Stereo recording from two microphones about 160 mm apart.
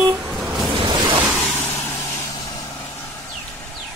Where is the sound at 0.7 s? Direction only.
30° right (ahead or behind).